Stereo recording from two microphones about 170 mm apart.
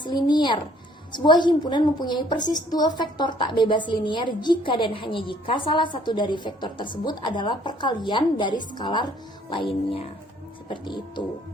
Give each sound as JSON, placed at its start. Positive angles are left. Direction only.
{"t": 0.0, "sound": "a woman's voice", "side_deg": 25}